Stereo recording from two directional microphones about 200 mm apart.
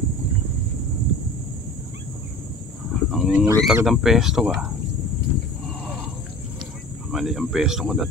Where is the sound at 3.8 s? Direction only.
Centre (ahead or behind).